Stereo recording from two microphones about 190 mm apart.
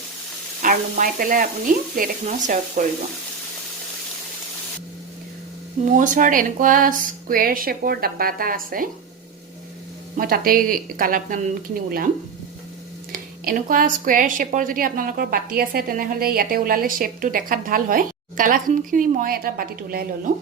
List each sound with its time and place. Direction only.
0.6 s a woman's voice: 45° right (ahead or behind)
5.8 s a woman's voice: 40° right (ahead or behind)
10.2 s a woman's voice: 50° right (ahead or behind)
13.4 s a woman's voice: 50° right (ahead or behind)